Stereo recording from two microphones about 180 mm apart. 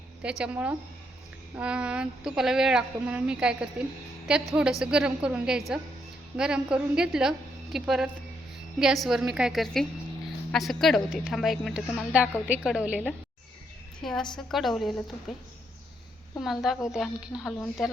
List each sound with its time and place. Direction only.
0.2 s speech: 5° right (ahead or behind)
14.0 s speech: 5° left (ahead or behind)
16.4 s speech: centre (ahead or behind)